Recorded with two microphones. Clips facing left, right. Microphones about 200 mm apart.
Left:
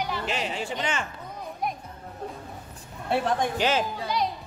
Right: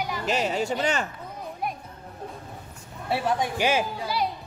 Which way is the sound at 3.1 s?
5° right (ahead or behind).